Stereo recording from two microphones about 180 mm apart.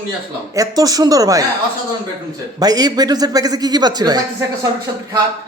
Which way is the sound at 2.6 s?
20° right (ahead or behind).